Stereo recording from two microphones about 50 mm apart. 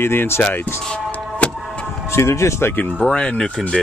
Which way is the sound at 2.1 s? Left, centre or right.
Left.